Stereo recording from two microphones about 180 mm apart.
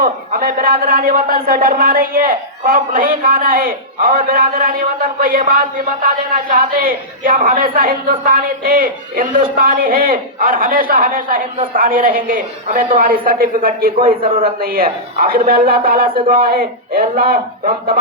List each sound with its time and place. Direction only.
0.0 s speech: 50° right (ahead or behind)
14.2 s a man's voice: 30° right (ahead or behind)
14.6 s speech: 55° right (ahead or behind)